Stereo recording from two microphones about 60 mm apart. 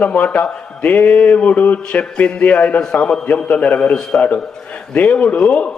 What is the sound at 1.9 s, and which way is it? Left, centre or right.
A man's voice, centre.